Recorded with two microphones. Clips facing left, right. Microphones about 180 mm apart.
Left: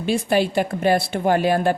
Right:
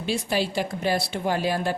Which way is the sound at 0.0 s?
55° left (ahead or behind).